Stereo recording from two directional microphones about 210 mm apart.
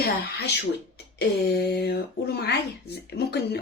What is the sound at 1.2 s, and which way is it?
Speech, 50° left (ahead or behind).